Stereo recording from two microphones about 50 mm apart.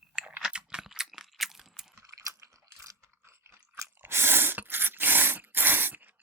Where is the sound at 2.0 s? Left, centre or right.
Right.